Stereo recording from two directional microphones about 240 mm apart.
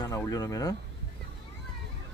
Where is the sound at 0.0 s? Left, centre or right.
Centre.